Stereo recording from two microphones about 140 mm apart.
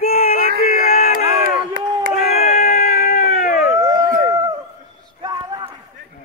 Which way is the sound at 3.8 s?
25° right (ahead or behind).